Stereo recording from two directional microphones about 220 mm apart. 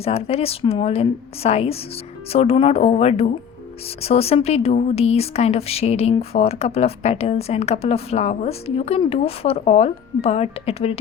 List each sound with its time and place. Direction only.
0.0 s speech: 25° left (ahead or behind)